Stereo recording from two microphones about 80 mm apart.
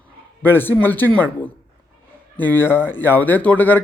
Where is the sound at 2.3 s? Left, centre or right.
Left.